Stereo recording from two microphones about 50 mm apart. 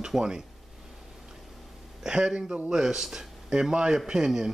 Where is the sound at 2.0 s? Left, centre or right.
Centre.